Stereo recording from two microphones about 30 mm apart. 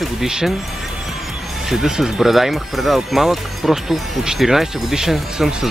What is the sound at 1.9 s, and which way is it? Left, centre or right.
Speech, right.